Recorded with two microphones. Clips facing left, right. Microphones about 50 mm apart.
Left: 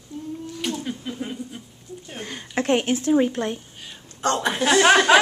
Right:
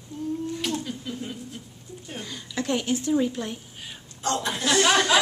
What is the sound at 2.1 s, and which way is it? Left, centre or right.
Speech, left.